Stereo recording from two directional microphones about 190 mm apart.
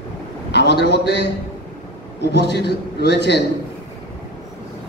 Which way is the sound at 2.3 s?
60° left (ahead or behind).